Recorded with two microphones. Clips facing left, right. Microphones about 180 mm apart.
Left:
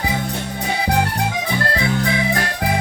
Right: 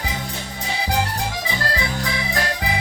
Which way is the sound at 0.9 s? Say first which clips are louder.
Left 3 dB; 60° left (ahead or behind).